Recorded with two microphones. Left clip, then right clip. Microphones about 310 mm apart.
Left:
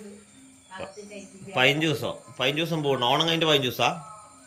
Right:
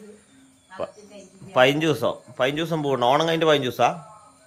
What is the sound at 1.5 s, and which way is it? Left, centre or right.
Speech, centre.